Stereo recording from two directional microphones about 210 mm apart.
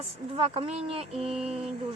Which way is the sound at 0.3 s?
25° right (ahead or behind).